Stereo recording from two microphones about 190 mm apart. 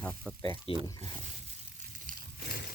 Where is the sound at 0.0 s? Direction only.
10° left (ahead or behind).